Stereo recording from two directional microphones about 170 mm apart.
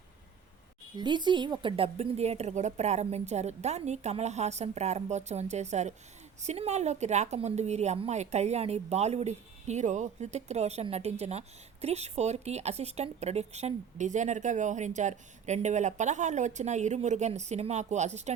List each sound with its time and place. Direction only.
0.9 s a woman's voice: 25° right (ahead or behind); by 18.3 s 40° right (ahead or behind)